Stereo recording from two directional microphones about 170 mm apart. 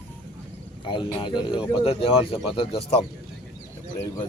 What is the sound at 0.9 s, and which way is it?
Speech, 30° left (ahead or behind).